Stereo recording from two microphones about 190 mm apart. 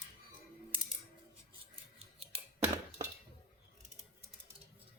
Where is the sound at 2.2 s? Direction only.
30° right (ahead or behind).